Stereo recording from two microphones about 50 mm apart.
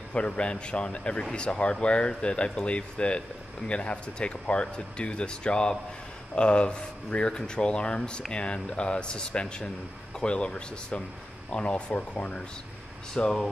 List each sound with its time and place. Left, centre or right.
0.1 s speech: left